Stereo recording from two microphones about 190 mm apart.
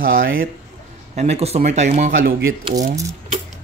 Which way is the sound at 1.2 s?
35° right (ahead or behind).